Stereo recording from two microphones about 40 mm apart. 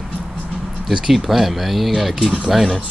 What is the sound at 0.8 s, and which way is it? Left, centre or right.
Speech, centre.